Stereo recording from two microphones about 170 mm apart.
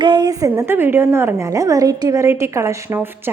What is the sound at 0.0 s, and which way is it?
A woman's voice, 25° right (ahead or behind).